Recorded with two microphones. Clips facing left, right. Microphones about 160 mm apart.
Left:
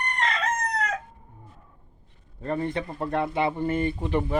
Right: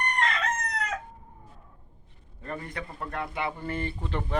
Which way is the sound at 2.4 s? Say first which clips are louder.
Left 9 dB; 30° left (ahead or behind).